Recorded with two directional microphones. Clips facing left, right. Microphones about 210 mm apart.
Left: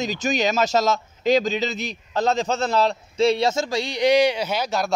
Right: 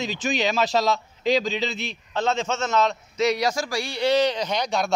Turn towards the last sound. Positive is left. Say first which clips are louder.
# left 1 dB
turn(degrees=5)  # may be behind; listen again after turning